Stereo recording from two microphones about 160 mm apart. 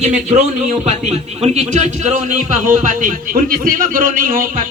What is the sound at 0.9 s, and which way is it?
A man's voice, 45° right (ahead or behind).